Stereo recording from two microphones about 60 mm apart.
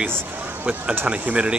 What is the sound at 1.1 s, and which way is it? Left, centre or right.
Speech, centre.